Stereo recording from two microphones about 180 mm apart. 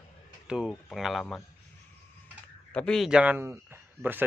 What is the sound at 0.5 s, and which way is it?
Speech, centre (ahead or behind).